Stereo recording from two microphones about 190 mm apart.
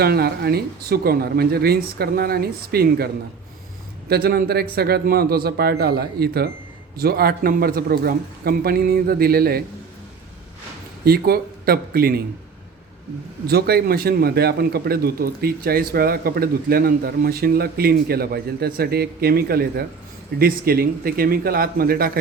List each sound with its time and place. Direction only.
0.0 s speech: 55° right (ahead or behind)
4.1 s a man's voice: 55° right (ahead or behind)
11.0 s a man's voice: 55° right (ahead or behind)
13.5 s a man's voice: 55° right (ahead or behind)